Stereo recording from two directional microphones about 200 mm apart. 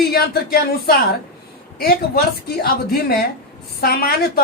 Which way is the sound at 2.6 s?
50° left (ahead or behind).